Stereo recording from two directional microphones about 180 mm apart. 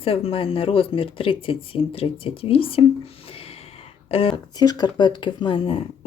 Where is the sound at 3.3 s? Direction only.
30° left (ahead or behind).